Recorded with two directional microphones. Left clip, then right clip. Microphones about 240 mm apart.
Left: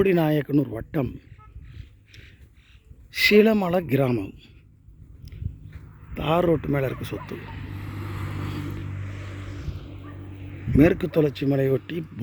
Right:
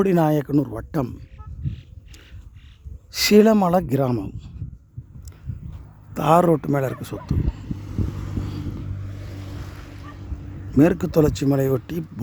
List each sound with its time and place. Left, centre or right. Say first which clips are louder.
0.0 s a man's voice: right 2 dB; centre
1.6 s a sound: right 15 dB; left
3.1 s a man's voice: right 2 dB; centre
6.1 s a man's voice: right 5 dB; centre
7.3 s vehicle: right 5 dB; centre
9.0 s vehicle: left 1 dB; right
10.4 s vehicle: right 1 dB; centre
10.8 s a man's voice: right 2 dB; centre